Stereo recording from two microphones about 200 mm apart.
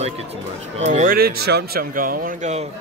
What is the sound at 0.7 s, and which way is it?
A man's voice, 35° right (ahead or behind).